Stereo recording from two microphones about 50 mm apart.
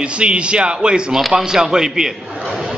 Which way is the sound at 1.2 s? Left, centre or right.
Centre.